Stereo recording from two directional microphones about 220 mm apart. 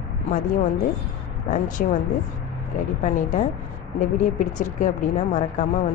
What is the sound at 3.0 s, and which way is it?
Speech, 35° left (ahead or behind).